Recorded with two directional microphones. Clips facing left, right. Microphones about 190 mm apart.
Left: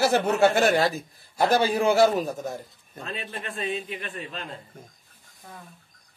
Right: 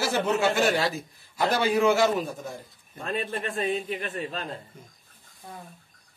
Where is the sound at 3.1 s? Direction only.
45° right (ahead or behind).